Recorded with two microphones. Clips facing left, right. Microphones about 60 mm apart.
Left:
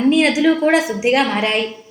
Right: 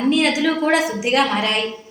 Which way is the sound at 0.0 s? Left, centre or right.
Left.